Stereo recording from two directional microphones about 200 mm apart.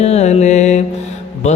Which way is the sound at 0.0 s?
35° left (ahead or behind).